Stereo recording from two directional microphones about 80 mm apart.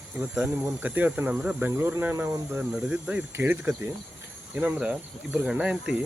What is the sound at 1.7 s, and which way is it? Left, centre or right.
Speech, right.